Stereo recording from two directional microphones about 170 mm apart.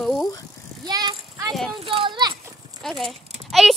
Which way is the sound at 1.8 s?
30° right (ahead or behind).